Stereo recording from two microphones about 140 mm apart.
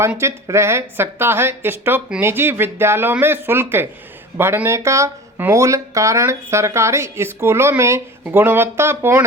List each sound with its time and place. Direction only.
0.2 s a woman's voice: 20° right (ahead or behind)